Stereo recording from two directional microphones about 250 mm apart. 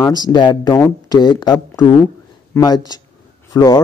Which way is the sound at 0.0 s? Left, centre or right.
Centre.